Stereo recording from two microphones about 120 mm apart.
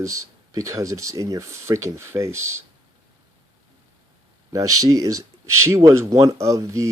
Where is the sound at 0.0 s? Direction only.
25° right (ahead or behind).